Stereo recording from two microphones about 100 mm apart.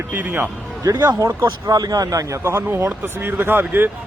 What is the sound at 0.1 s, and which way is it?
Speech, 20° right (ahead or behind).